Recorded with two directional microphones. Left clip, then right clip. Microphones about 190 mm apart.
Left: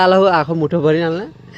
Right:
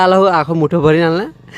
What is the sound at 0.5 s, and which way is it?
Speech, 15° right (ahead or behind).